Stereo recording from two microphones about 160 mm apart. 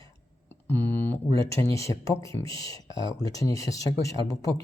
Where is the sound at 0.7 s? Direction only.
10° left (ahead or behind).